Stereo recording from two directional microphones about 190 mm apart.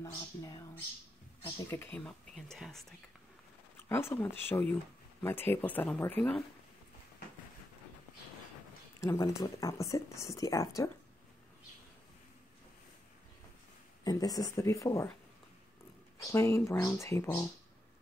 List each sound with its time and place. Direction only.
0.0 s speech: 20° left (ahead or behind)
1.6 s speech: 10° left (ahead or behind)
3.9 s speech: 10° left (ahead or behind)
9.0 s speech: 15° left (ahead or behind)
14.0 s speech: 20° left (ahead or behind)
16.2 s speech: 15° left (ahead or behind)